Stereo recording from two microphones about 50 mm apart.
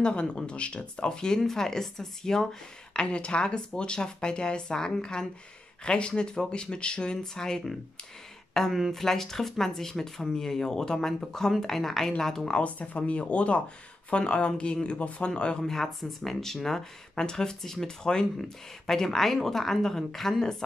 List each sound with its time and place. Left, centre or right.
0.0 s speech: left
8.7 s speech: centre
12.5 s speech: left; by 20.5 s centre